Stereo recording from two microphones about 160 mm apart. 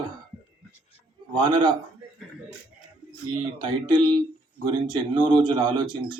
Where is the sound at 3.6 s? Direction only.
30° right (ahead or behind).